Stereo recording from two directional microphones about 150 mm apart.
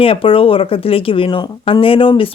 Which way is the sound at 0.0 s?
35° left (ahead or behind).